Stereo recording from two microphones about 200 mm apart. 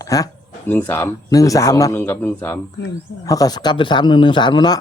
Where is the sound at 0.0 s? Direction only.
15° left (ahead or behind).